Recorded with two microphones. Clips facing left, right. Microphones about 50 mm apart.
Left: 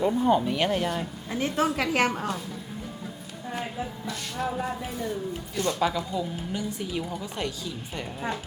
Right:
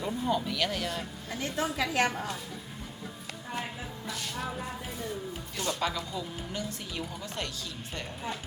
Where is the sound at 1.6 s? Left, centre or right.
Left.